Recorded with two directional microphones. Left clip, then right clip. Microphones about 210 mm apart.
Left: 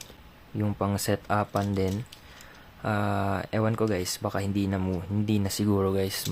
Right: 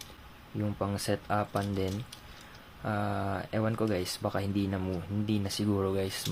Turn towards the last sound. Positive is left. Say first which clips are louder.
# left 4 dB
turn(degrees=15)  # may be behind; listen again after turning